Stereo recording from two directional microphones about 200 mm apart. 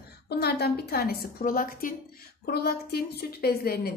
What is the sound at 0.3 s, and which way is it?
A woman's voice, 50° left (ahead or behind).